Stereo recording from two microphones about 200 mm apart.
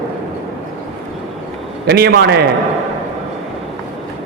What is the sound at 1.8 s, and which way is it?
Speech, 55° right (ahead or behind).